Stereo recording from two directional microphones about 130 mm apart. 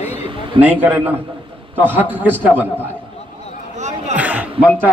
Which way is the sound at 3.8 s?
65° right (ahead or behind).